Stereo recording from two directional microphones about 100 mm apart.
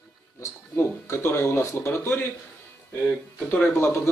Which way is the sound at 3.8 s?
25° left (ahead or behind).